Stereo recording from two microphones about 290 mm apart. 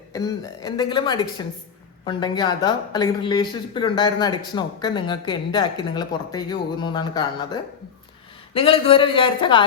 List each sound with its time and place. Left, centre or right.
0.1 s a woman's voice: centre